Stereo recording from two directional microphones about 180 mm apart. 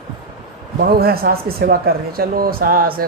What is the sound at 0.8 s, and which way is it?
Speech, 55° right (ahead or behind).